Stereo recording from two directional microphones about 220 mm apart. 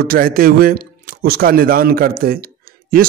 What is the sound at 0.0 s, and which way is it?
A man's voice, 40° right (ahead or behind).